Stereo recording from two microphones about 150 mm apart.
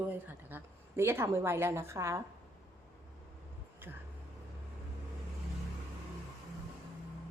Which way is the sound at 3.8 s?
15° right (ahead or behind).